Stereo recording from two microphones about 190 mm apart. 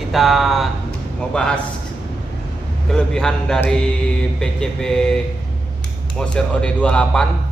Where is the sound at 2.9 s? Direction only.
5° left (ahead or behind).